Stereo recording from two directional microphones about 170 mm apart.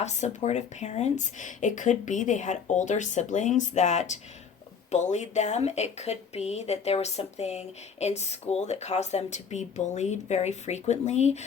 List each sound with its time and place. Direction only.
0.0 s speech: 40° left (ahead or behind)